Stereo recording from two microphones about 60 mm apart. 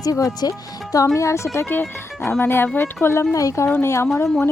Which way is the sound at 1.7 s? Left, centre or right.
Left.